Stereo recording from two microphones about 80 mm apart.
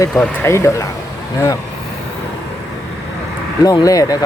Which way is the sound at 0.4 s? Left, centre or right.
Left.